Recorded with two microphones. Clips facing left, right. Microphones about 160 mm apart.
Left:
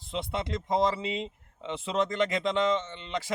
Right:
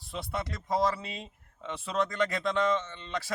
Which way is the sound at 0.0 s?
20° left (ahead or behind).